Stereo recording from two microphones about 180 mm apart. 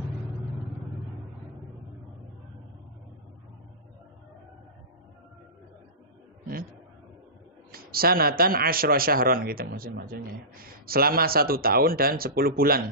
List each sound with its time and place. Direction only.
7.7 s a man's voice: 55° right (ahead or behind)